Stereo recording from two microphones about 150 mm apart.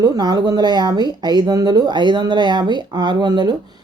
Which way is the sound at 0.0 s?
25° right (ahead or behind).